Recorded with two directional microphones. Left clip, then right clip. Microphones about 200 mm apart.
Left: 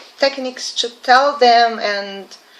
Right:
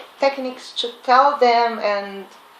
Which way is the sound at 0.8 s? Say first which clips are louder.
Left 2 dB; 20° left (ahead or behind).